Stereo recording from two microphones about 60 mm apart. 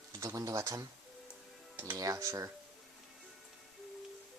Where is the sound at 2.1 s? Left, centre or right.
Right.